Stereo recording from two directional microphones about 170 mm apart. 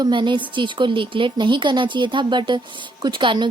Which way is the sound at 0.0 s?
25° right (ahead or behind).